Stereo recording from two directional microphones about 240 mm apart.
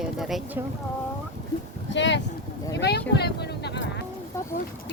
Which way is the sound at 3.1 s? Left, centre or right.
Left.